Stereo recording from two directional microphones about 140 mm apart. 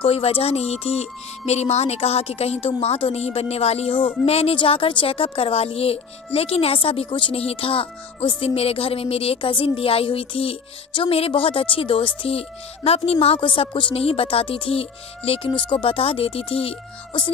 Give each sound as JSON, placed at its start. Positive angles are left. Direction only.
{"t": 0.0, "sound": "a woman's voice", "side_deg": 45}